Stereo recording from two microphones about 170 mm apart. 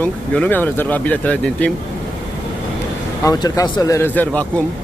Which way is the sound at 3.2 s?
20° left (ahead or behind).